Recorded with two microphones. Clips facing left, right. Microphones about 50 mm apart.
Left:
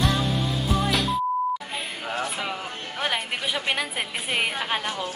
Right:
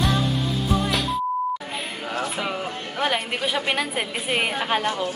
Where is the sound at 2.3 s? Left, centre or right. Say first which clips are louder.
Right 3 dB; centre.